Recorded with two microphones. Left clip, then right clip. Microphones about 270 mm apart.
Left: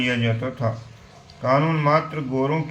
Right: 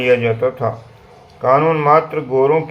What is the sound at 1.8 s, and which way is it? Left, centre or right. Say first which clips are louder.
Speech: right 8 dB; left.